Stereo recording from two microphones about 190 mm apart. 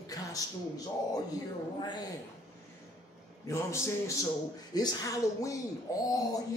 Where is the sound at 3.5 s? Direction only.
15° left (ahead or behind).